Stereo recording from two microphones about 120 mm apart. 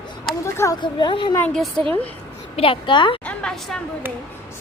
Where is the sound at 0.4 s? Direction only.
25° left (ahead or behind).